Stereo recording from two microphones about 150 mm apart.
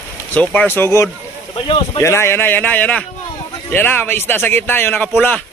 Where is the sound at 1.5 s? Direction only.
35° left (ahead or behind).